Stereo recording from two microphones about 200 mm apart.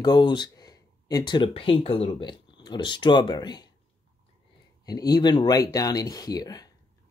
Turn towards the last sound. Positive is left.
turn(degrees=20)  # may be behind; listen again after turning